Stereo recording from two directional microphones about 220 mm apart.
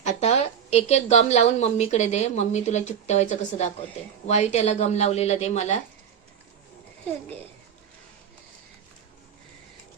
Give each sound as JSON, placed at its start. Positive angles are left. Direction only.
{"t": 0.0, "sound": "a woman's voice", "side_deg": 30}